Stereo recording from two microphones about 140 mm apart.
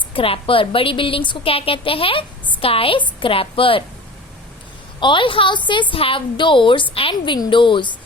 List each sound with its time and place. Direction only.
0.1 s a woman's voice: 40° left (ahead or behind)
4.9 s a woman's voice: 35° left (ahead or behind)